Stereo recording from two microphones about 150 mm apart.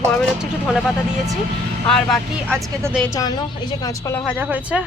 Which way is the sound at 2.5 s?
20° right (ahead or behind).